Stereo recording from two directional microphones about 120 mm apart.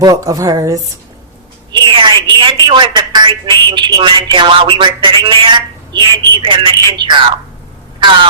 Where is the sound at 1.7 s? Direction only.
40° right (ahead or behind).